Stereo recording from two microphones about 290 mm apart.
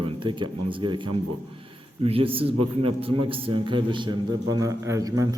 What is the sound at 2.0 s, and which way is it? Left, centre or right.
A man's voice, centre.